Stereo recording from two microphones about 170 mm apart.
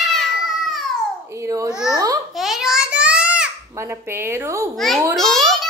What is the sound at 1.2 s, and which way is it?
Babbling, 20° right (ahead or behind).